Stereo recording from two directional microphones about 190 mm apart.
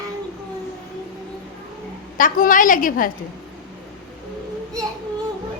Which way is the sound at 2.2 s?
45° left (ahead or behind).